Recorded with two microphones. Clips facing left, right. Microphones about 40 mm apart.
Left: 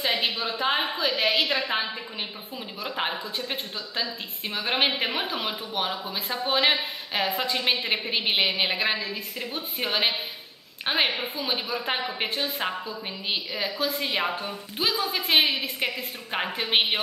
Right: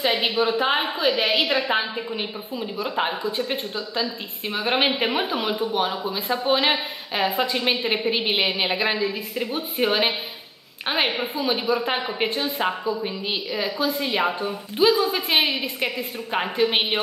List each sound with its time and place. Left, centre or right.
0.0 s a woman's voice: centre
2.8 s a woman's voice: centre